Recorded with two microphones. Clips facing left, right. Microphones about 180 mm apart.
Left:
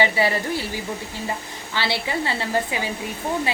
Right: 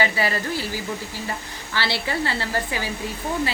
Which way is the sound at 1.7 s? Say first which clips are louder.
Left 1 dB; 20° left (ahead or behind).